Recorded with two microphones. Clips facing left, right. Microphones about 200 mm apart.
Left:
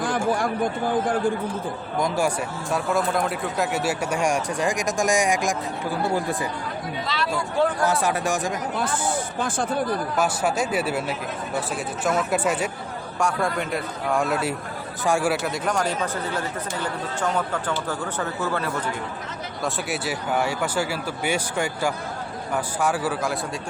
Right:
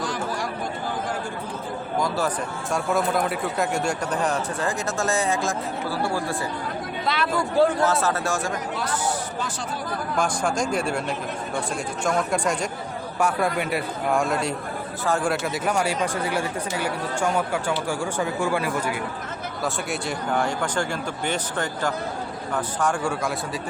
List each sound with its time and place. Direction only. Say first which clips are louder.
0.0 s chatter: left 5 dB; 55° left (ahead or behind)
2.0 s speech: left 2 dB; 15° left (ahead or behind)
2.7 s speech: even; centre (ahead or behind); by 6.3 s 20° left (ahead or behind)
7.1 s speech: right 3 dB; 55° right (ahead or behind)
7.9 s speech: even; 15° left (ahead or behind)
8.7 s speech: left 2 dB; 50° left (ahead or behind)
10.2 s a man's voice: right 1 dB; 5° left (ahead or behind)
12.0 s a man's voice: left 1 dB; 5° left (ahead or behind)
13.1 s a man's voice: right 1 dB; 5° right (ahead or behind)
15.5 s speech: right 1 dB; 10° right (ahead or behind)
19.6 s speech: left 1 dB; 5° left (ahead or behind)